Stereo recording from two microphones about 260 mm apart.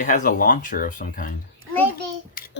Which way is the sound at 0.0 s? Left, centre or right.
Left.